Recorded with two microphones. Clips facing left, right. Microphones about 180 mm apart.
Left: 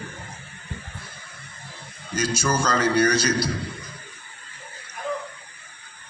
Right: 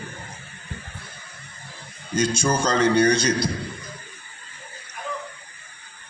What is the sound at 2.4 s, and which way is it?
Speech, 30° right (ahead or behind).